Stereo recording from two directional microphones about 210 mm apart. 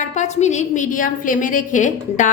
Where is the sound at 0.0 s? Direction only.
35° left (ahead or behind).